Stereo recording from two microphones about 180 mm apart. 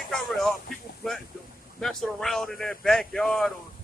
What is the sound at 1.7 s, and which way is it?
Speech, centre (ahead or behind).